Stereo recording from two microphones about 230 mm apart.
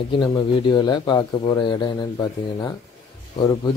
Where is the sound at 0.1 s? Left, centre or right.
Left.